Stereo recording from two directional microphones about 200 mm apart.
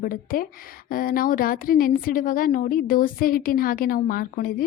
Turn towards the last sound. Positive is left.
turn(degrees=45)  # may be behind; listen again after turning